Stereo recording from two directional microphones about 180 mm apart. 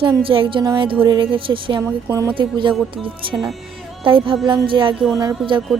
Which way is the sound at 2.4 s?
25° right (ahead or behind).